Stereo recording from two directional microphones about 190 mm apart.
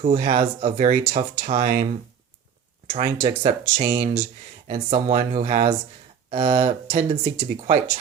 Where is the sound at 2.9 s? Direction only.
30° right (ahead or behind).